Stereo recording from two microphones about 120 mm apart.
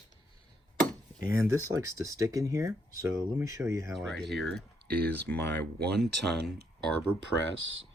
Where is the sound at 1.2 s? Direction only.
25° right (ahead or behind).